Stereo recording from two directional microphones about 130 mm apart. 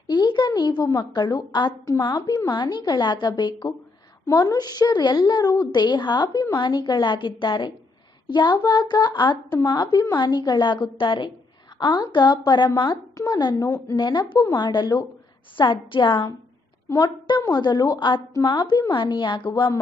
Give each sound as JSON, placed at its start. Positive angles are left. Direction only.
{"t": 0.0, "sound": "a woman's voice", "side_deg": 35}